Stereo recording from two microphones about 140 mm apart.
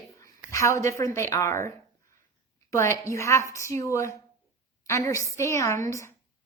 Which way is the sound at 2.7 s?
20° left (ahead or behind).